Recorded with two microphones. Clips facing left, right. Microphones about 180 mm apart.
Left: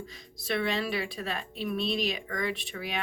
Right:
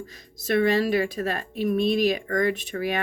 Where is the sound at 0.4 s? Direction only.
50° right (ahead or behind).